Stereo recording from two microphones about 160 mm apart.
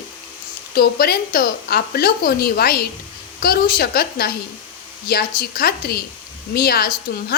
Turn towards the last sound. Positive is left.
turn(degrees=75)  # may be behind; listen again after turning